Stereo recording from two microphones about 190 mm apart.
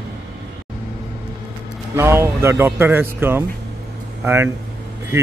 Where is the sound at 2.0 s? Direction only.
15° right (ahead or behind).